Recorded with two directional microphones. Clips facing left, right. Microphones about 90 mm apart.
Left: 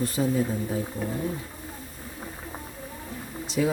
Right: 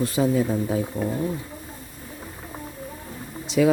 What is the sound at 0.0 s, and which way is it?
Speech, 90° right.